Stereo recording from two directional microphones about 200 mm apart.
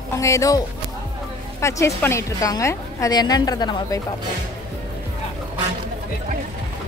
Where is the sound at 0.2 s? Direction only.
15° left (ahead or behind).